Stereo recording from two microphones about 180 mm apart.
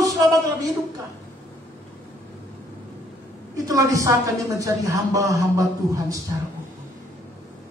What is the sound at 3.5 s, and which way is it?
A woman's voice, 20° right (ahead or behind).